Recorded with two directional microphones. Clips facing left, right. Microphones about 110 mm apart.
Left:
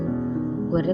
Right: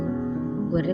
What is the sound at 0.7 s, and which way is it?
Music, 30° left (ahead or behind).